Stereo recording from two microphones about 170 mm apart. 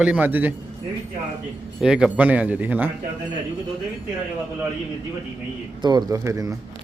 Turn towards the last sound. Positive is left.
turn(degrees=-20)  # may be behind; listen again after turning